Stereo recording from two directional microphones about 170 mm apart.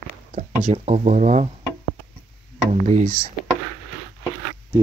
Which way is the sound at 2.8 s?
45° right (ahead or behind).